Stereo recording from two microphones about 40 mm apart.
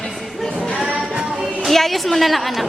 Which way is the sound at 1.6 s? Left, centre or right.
Centre.